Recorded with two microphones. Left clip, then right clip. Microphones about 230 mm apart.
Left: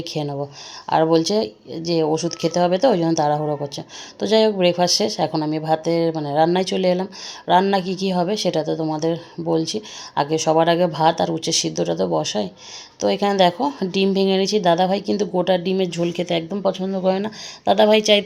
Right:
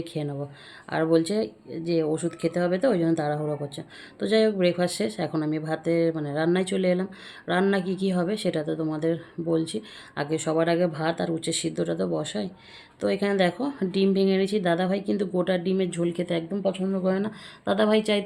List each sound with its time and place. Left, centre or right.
0.0 s speech: centre